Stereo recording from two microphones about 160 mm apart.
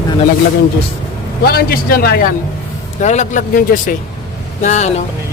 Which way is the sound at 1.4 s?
70° left (ahead or behind).